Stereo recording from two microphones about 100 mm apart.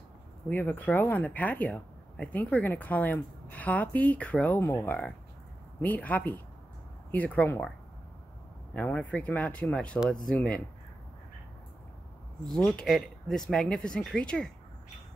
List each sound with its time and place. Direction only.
0.5 s speech: 20° left (ahead or behind)
4.6 s speech: 25° left (ahead or behind)
8.7 s speech: 15° left (ahead or behind)
12.4 s speech: 5° left (ahead or behind)